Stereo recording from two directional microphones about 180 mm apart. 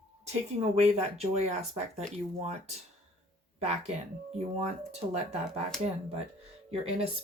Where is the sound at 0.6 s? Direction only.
35° right (ahead or behind).